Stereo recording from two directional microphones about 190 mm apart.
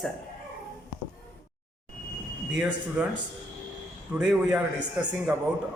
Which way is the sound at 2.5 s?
5° right (ahead or behind).